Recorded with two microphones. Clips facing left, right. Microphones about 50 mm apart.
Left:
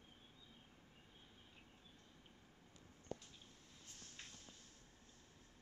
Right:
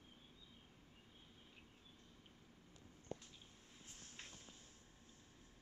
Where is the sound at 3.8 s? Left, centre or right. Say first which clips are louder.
Right 1 dB; centre.